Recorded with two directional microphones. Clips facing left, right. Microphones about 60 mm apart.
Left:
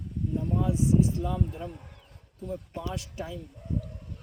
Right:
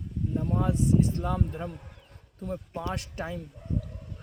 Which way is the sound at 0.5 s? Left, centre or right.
Right.